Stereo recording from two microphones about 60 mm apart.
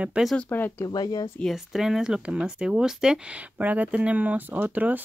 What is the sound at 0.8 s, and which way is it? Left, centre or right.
Speech, left.